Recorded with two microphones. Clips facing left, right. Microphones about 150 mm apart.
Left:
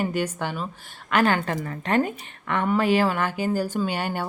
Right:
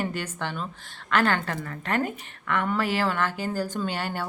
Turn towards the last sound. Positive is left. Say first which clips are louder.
# left 3 dB
turn(degrees=15)  # may be behind; listen again after turning